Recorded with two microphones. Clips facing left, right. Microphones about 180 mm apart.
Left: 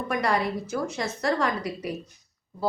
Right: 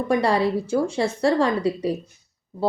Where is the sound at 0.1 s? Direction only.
30° right (ahead or behind).